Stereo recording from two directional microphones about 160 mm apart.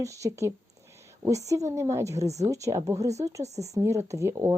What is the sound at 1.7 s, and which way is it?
Speech, 15° right (ahead or behind).